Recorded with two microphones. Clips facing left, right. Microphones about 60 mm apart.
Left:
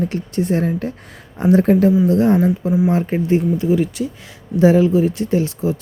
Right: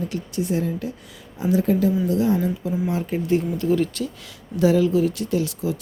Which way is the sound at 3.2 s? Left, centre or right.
Left.